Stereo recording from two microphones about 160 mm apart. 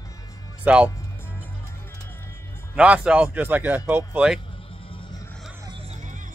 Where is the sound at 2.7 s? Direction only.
5° right (ahead or behind).